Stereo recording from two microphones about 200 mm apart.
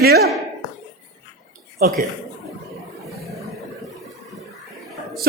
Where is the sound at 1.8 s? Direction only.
45° right (ahead or behind).